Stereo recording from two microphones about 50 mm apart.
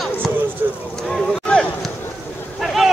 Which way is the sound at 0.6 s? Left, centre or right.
Right.